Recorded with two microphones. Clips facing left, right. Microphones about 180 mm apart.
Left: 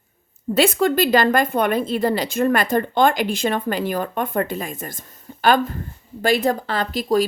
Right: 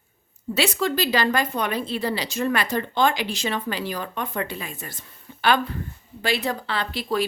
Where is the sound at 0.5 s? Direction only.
50° left (ahead or behind).